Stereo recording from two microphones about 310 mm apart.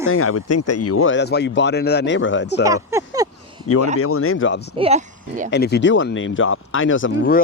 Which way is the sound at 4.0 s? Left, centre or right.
Left.